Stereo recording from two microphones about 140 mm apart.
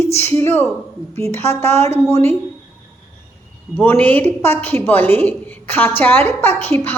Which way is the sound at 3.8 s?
10° left (ahead or behind).